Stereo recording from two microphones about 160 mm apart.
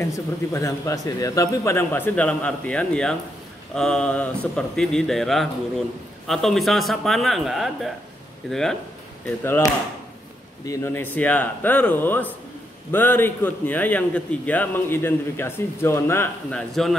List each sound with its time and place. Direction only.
0.0 s a man's voice: 20° left (ahead or behind); by 8.7 s 5° left (ahead or behind)
9.4 s a man's voice: 15° left (ahead or behind)